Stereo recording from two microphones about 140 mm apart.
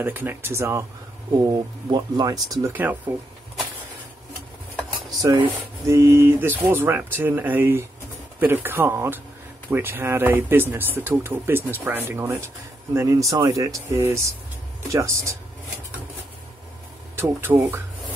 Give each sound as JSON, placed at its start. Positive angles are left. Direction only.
{"t": 0.0, "sound": "speech", "side_deg": -15}
{"t": 2.7, "sound": "speech", "side_deg": -15}
{"t": 5.2, "sound": "speech", "side_deg": -35}
{"t": 5.9, "sound": "speech", "side_deg": -20}
{"t": 17.1, "sound": "speech", "side_deg": -15}